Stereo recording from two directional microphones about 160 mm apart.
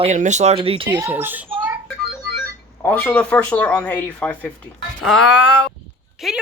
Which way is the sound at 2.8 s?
10° left (ahead or behind).